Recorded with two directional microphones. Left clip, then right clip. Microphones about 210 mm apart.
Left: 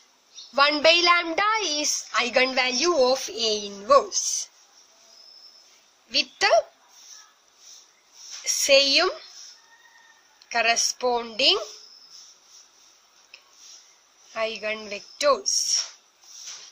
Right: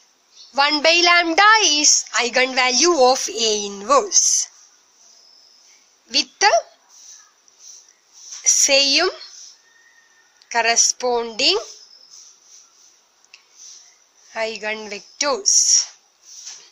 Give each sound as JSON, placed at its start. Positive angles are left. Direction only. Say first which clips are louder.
{"t": 0.6, "sound": "a woman's voice", "louder": "right 3 dB", "side_deg": -10}
{"t": 6.0, "sound": "a woman's voice", "louder": "right 5 dB", "side_deg": -20}
{"t": 8.6, "sound": "a woman's voice", "louder": "even", "side_deg": -15}
{"t": 10.5, "sound": "a woman's voice", "louder": "right 5 dB", "side_deg": -15}
{"t": 14.3, "sound": "a woman's voice", "louder": "right 3 dB", "side_deg": -15}